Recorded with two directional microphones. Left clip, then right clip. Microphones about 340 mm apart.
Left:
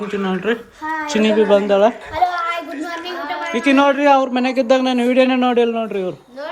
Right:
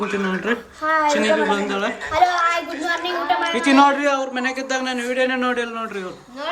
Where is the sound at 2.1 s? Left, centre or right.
Right.